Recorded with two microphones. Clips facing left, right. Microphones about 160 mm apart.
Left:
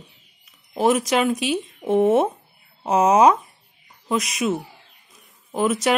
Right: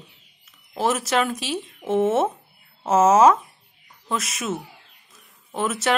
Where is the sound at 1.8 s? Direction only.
35° left (ahead or behind).